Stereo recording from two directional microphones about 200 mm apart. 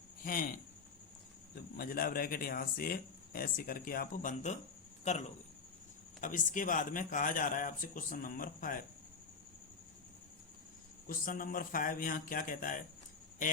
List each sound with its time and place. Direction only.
0.2 s speech: 45° left (ahead or behind)
1.7 s speech: 45° left (ahead or behind)
6.1 s a man's voice: 40° left (ahead or behind)
11.0 s speech: 45° left (ahead or behind)